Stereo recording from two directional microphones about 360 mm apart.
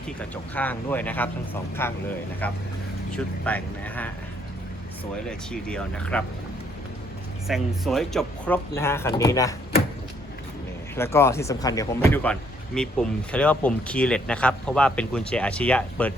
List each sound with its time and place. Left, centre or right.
0.2 s speech: centre
5.3 s speech: centre
7.4 s speech: centre
10.9 s speech: centre